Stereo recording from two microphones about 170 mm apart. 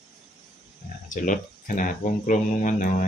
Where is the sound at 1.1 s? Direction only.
50° left (ahead or behind).